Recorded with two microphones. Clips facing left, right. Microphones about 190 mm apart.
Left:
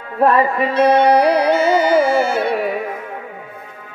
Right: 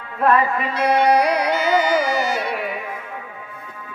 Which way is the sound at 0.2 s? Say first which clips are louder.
Left 4 dB; 35° left (ahead or behind).